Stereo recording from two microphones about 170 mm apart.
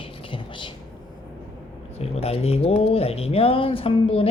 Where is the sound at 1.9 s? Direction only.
35° left (ahead or behind).